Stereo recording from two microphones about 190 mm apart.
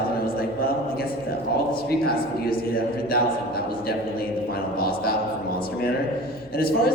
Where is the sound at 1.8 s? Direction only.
55° left (ahead or behind).